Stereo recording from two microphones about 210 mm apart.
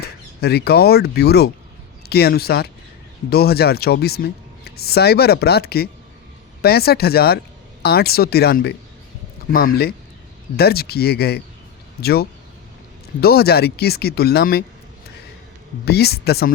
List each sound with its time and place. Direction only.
0.4 s speech: 50° left (ahead or behind)
15.9 s speech: 50° left (ahead or behind)